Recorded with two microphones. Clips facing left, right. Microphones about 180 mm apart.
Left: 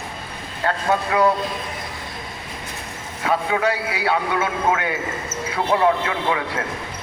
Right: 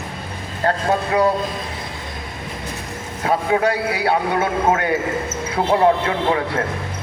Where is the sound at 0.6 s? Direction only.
35° right (ahead or behind).